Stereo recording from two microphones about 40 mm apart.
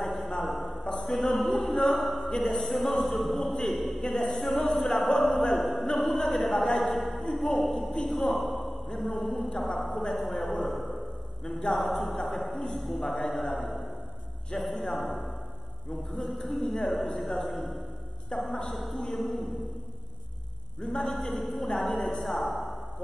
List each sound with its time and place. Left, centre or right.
0.1 s a sound: centre
2.3 s a woman's voice: centre
2.6 s a man's voice: centre
4.4 s music: centre
5.5 s a sound: centre
9.6 s speech: centre
10.2 s a sound: centre
11.7 s a man's voice: left
12.0 s a man's voice: centre
18.3 s a man's voice: centre
18.7 s a woman's voice: centre
20.8 s a woman's voice: centre